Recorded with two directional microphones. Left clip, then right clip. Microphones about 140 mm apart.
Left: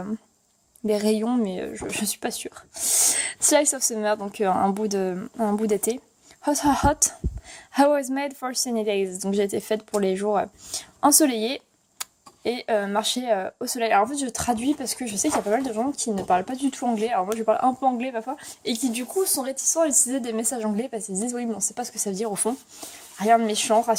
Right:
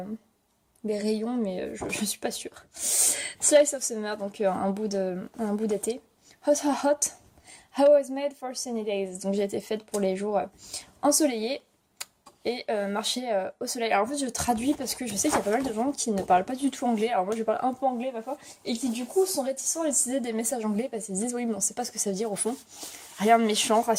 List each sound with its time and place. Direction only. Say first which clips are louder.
0.9 s speech: left 6 dB; 40° left (ahead or behind); by 17.7 s 20° left (ahead or behind)
17.7 s speech: left 4 dB; 35° left (ahead or behind)
18.3 s speech: left 4 dB; 55° left (ahead or behind); by 22.5 s 25° left (ahead or behind)
23.1 s speech: left 2 dB; centre (ahead or behind)